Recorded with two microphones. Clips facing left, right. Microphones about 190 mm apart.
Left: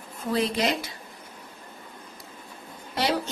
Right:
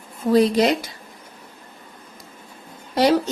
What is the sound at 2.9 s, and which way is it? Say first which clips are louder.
Speech: right 9 dB; 40° right (ahead or behind).